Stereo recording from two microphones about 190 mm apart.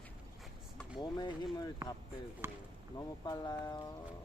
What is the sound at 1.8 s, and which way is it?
Speech, 15° right (ahead or behind).